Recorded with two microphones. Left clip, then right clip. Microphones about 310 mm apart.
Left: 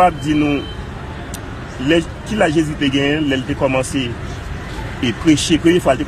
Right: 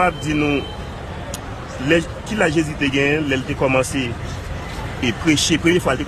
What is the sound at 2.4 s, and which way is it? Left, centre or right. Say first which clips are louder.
A man's voice: left 3 dB; centre.